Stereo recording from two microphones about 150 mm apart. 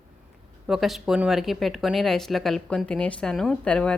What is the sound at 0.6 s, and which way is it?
Speech, centre (ahead or behind).